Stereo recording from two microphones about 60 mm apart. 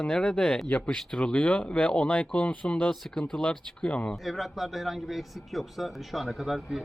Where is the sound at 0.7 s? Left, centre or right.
Left.